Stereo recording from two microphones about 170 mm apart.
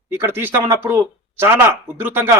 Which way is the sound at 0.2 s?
15° right (ahead or behind).